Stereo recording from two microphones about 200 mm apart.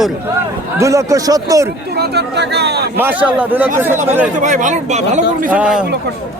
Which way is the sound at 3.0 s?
10° right (ahead or behind).